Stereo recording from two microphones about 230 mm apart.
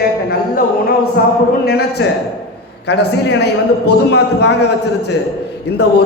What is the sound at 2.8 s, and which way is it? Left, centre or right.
A man's voice, left.